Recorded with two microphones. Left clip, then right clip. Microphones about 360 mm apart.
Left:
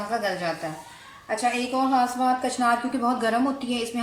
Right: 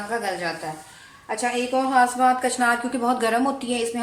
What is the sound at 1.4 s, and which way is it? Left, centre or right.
A woman's voice, centre.